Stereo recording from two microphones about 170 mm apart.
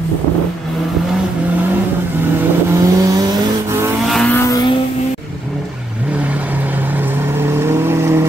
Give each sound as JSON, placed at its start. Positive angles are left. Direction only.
{"t": 2.7, "sound": "vehicle", "side_deg": -20}
{"t": 4.1, "sound": "vehicle", "side_deg": 5}
{"t": 4.4, "sound": "vehicle", "side_deg": 20}
{"t": 7.3, "sound": "vehicle", "side_deg": -15}